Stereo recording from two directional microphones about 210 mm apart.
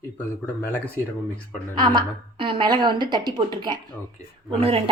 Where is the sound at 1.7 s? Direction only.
20° right (ahead or behind).